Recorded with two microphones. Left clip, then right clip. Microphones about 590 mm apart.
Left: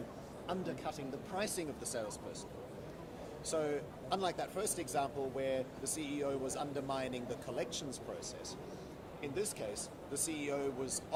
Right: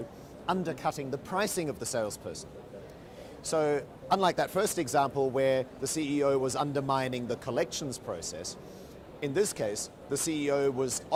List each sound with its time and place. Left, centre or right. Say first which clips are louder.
0.4 s speech: right 10 dB; right
3.4 s speech: right 9 dB; right